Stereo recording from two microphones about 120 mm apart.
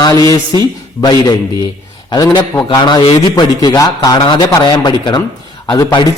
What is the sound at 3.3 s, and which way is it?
A man's voice, 35° left (ahead or behind).